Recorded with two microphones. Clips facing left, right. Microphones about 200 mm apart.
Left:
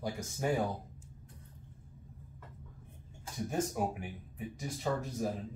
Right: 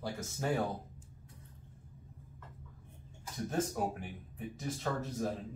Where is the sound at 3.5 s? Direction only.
10° left (ahead or behind).